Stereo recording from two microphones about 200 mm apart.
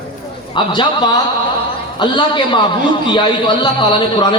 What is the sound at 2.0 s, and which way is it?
A man's voice, 25° left (ahead or behind).